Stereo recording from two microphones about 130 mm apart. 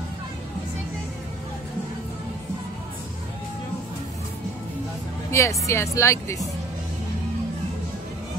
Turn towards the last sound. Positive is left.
turn(degrees=25)  # may be behind; listen again after turning